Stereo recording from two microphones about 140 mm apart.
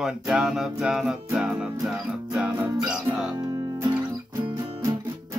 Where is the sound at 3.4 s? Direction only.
25° right (ahead or behind).